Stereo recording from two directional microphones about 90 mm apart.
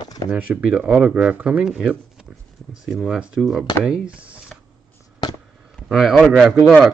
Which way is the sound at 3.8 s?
10° right (ahead or behind).